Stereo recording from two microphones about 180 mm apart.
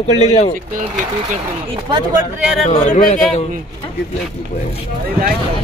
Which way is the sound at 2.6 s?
40° left (ahead or behind).